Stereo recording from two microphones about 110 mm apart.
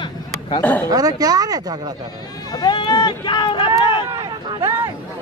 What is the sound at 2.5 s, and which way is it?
Speech, 40° left (ahead or behind).